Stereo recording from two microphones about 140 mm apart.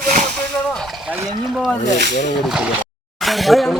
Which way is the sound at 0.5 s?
5° left (ahead or behind).